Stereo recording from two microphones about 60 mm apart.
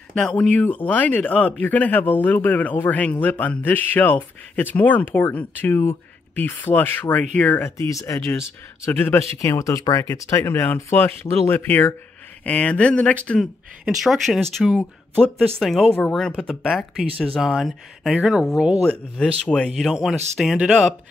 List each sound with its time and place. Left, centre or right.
0.1 s speech: centre
0.6 s speech: left
7.6 s speech: left
8.2 s speech: left
9.4 s speech: left
10.4 s speech: left
12.4 s speech: left
13.8 s speech: centre
19.1 s speech: centre
19.9 s speech: centre